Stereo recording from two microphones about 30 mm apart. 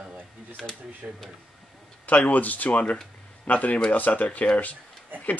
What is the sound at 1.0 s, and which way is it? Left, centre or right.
Speech, right.